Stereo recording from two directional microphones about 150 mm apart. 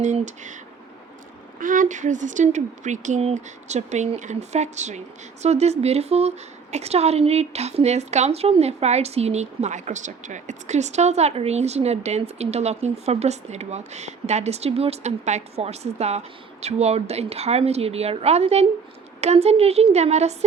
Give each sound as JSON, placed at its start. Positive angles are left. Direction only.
{"t": 0.0, "sound": "speech", "side_deg": -55}
{"t": 1.5, "sound": "speech", "side_deg": -65}